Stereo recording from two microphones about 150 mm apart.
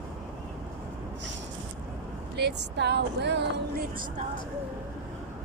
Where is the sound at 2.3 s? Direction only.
90° right.